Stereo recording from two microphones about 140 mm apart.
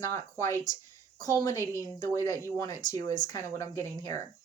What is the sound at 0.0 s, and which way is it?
A woman's voice, 20° left (ahead or behind).